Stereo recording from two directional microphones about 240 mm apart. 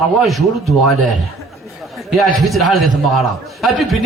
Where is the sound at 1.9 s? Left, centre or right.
Centre.